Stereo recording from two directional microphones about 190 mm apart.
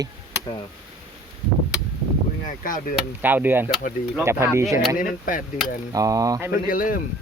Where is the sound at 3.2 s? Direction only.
10° right (ahead or behind).